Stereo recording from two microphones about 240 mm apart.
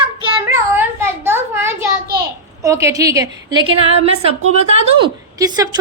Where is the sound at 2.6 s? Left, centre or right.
Centre.